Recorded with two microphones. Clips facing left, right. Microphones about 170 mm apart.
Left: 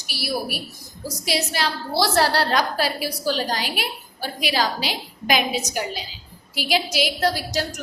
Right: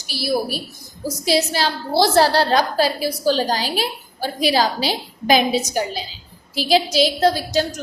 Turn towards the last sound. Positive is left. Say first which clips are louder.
# right 5 dB
turn(degrees=-25)  # may be behind; listen again after turning